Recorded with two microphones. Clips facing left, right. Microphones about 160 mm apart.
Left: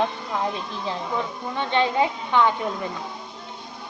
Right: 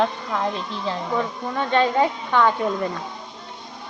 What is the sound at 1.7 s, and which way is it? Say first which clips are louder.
Speech: right 2 dB; 45° right (ahead or behind).